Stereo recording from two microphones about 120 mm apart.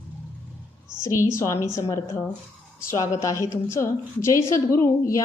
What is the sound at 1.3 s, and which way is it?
A woman's voice, 25° left (ahead or behind).